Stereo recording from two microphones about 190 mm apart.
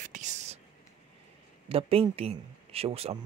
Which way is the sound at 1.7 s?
30° right (ahead or behind).